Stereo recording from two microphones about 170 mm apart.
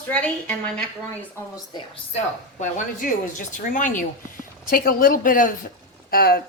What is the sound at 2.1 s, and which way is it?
Speech, 45° left (ahead or behind).